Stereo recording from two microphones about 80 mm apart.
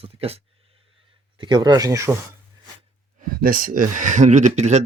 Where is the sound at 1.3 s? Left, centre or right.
Right.